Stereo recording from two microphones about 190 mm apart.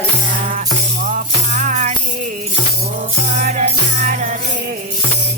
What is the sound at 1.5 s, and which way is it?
Music, 40° right (ahead or behind).